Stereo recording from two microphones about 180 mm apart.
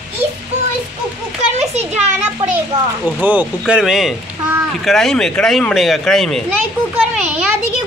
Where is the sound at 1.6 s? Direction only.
35° right (ahead or behind).